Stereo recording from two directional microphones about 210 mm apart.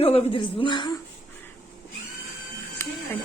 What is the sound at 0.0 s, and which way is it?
Speech, 25° left (ahead or behind).